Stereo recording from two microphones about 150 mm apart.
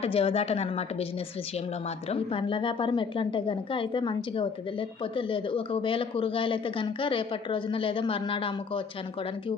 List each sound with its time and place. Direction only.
0.0 s speech: 40° left (ahead or behind)
2.0 s speech: 40° left (ahead or behind)